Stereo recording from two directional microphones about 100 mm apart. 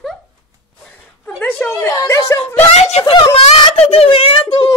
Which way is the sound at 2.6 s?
90° left.